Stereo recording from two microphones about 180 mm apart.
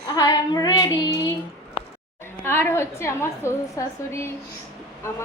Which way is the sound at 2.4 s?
10° left (ahead or behind).